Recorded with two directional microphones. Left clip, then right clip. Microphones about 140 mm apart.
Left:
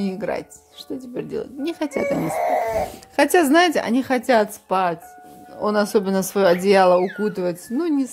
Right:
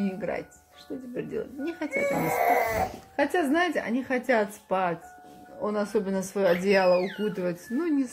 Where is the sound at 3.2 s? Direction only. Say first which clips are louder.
Left 9 dB; 70° left (ahead or behind); by 8.1 s 30° left (ahead or behind).